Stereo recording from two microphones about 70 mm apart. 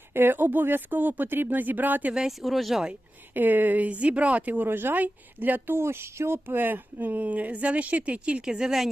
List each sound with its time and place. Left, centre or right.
0.1 s speech: right
2.1 s speech: centre
3.3 s speech: right; by 8.9 s centre